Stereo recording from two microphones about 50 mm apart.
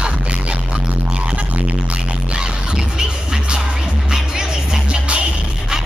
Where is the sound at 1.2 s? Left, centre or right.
Right.